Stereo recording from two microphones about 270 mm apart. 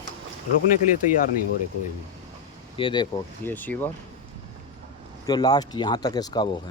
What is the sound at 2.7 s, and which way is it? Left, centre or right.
Speech, centre.